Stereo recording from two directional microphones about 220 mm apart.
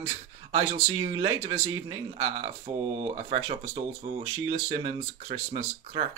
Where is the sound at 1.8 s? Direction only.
20° right (ahead or behind).